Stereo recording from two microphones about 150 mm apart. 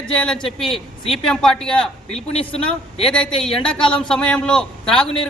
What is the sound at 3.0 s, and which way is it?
A man's voice, 5° left (ahead or behind).